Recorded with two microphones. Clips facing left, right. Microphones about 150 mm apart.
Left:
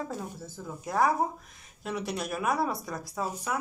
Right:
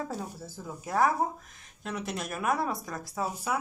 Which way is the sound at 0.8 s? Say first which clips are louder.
Even; centre (ahead or behind).